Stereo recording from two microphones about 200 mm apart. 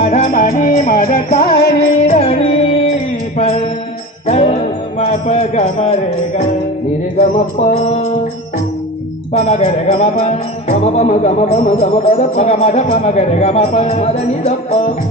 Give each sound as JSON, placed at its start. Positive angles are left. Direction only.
{"t": 0.0, "sound": "music", "side_deg": 35}
{"t": 1.8, "sound": "music", "side_deg": 30}
{"t": 3.3, "sound": "mantra", "side_deg": 30}
{"t": 4.3, "sound": "speech", "side_deg": 30}
{"t": 7.2, "sound": "music", "side_deg": 35}
{"t": 9.4, "sound": "music", "side_deg": 35}